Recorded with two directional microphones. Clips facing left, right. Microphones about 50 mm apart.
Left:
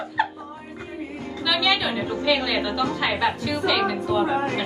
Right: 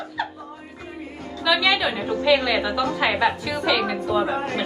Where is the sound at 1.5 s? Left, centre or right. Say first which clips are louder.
Right 2 dB; centre.